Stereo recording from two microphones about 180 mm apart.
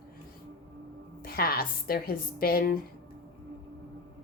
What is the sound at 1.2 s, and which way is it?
A woman's voice, 55° left (ahead or behind).